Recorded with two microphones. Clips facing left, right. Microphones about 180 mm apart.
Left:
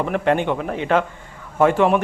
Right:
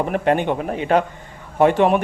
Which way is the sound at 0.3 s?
15° right (ahead or behind).